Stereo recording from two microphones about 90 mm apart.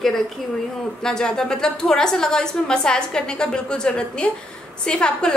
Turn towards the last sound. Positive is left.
turn(degrees=10)  # may be behind; listen again after turning